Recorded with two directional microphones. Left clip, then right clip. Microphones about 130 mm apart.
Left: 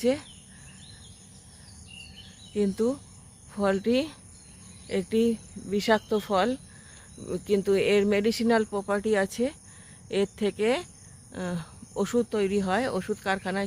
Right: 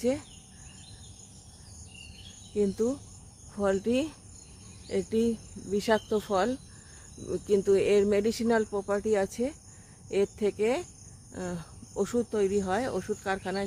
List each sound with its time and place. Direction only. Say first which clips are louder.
0.0 s speech: left 3 dB; 25° left (ahead or behind)
2.6 s speech: left 1 dB; 30° left (ahead or behind)